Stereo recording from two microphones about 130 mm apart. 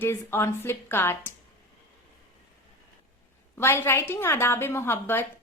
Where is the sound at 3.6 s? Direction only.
20° left (ahead or behind).